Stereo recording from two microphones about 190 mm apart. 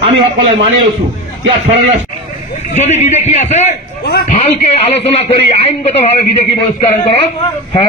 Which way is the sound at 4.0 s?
60° left (ahead or behind).